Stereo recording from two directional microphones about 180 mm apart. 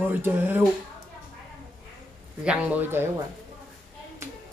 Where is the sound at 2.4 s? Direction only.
10° right (ahead or behind).